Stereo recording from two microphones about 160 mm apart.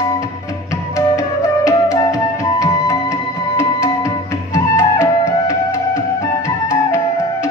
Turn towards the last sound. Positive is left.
turn(degrees=20)  # may be behind; listen again after turning